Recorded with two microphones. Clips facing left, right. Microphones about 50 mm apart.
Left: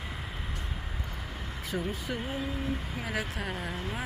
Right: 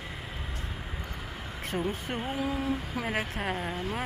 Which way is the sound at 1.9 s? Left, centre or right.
Right.